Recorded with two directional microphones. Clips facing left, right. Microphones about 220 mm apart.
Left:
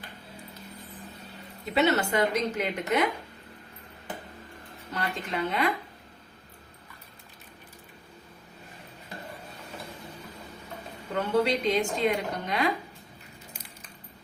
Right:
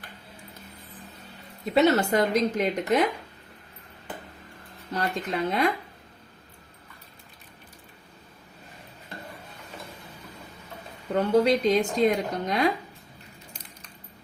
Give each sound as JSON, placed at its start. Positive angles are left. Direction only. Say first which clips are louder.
{"t": 1.7, "sound": "a woman's voice", "louder": "right 4 dB", "side_deg": -40}
{"t": 4.9, "sound": "a woman's voice", "louder": "right 3 dB", "side_deg": -40}
{"t": 11.1, "sound": "a woman's voice", "louder": "right 4 dB", "side_deg": -40}